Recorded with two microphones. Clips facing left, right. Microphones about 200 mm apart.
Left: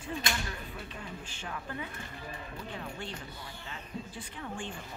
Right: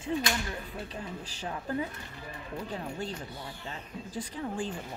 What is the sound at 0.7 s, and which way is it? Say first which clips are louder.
Speech: right 4 dB; 35° right (ahead or behind).